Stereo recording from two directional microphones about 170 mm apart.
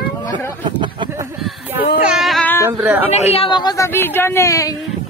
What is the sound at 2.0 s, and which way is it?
Speech, 5° right (ahead or behind).